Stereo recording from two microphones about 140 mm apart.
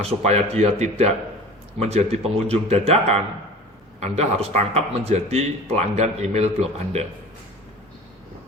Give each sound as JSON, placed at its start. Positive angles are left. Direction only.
{"t": 0.0, "sound": "speech", "side_deg": -50}